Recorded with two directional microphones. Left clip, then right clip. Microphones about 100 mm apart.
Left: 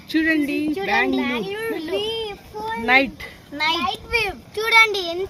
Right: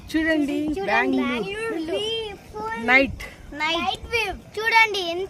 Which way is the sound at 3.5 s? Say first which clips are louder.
Left 3 dB; 25° left (ahead or behind).